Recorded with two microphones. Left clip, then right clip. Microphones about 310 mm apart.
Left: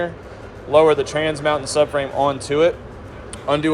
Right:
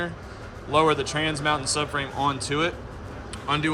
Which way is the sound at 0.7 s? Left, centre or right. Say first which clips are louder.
Left 7 dB; centre.